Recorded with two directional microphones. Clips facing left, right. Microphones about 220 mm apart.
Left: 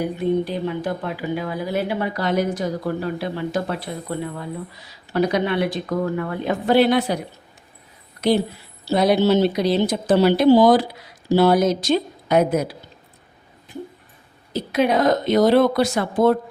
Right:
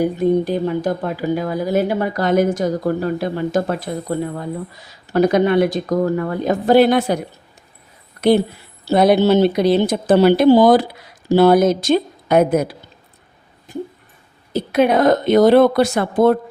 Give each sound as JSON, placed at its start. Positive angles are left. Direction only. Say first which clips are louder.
{"t": 0.0, "sound": "speech", "louder": "right 5 dB", "side_deg": -45}
{"t": 8.8, "sound": "speech", "louder": "right 4 dB", "side_deg": -55}
{"t": 13.7, "sound": "a sound", "louder": "right 6 dB", "side_deg": -45}
{"t": 14.5, "sound": "speech", "louder": "right 4 dB", "side_deg": -55}